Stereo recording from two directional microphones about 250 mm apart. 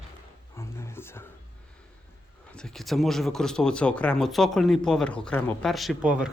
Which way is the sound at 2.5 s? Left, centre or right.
Centre.